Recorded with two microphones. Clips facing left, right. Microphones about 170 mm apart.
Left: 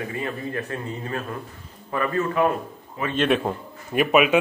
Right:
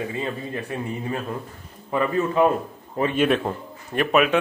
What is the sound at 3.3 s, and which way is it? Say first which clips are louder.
A man's voice: even; 5° left (ahead or behind).